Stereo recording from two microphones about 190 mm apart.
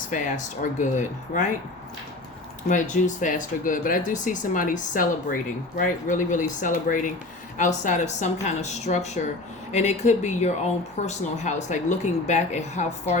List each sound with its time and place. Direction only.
0.1 s a woman's voice: 40° left (ahead or behind)
2.9 s a woman's voice: 45° left (ahead or behind)